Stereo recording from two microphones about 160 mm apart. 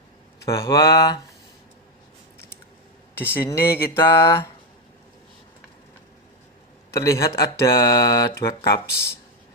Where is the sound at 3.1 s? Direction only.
15° left (ahead or behind).